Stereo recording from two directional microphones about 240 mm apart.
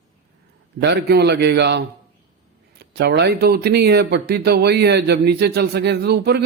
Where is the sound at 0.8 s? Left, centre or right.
Right.